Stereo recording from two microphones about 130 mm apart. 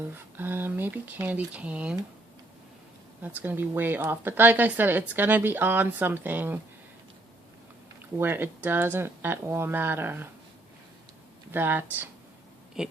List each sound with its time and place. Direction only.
0.3 s a woman's voice: 15° right (ahead or behind)
3.2 s a woman's voice: 15° right (ahead or behind)
8.2 s a woman's voice: 15° right (ahead or behind)
11.5 s a woman's voice: 15° right (ahead or behind)
12.8 s a sound: 5° right (ahead or behind)